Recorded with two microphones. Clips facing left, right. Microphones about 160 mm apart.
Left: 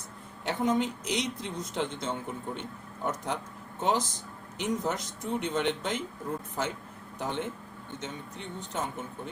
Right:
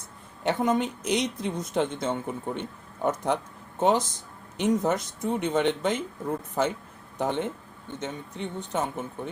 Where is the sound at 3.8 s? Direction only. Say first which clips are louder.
Right 5 dB; 60° right (ahead or behind).